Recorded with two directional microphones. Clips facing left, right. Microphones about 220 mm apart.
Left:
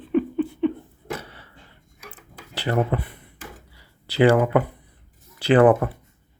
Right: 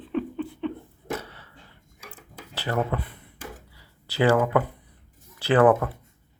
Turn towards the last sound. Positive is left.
turn(degrees=20)  # may be behind; listen again after turning